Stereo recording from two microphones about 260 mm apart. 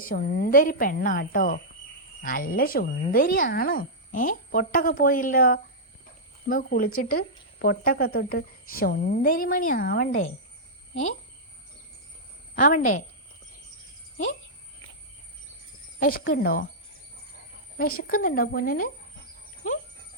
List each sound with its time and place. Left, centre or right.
0.0 s speech: left
12.5 s speech: left
16.0 s speech: left
17.7 s speech: left